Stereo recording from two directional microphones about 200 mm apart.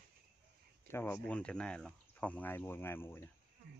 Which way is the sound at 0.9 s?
10° left (ahead or behind).